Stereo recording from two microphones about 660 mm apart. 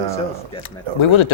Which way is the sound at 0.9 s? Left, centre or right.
Left.